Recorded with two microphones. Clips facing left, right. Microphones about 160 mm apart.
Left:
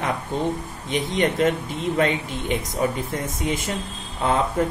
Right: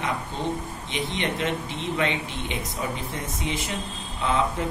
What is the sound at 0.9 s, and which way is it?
Speech, 45° left (ahead or behind).